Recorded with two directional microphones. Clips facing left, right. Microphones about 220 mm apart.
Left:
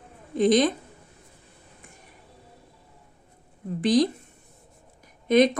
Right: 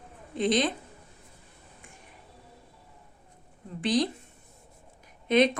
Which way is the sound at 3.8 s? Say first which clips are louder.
Left 5 dB; 45° left (ahead or behind).